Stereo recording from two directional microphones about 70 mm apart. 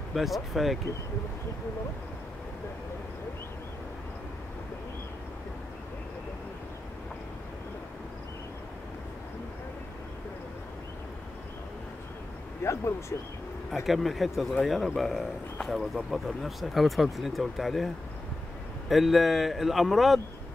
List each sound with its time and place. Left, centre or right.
0.1 s speech: centre
12.6 s speech: left
13.8 s speech: centre